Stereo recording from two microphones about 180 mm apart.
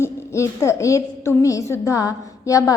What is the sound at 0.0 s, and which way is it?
A woman's voice, 15° left (ahead or behind).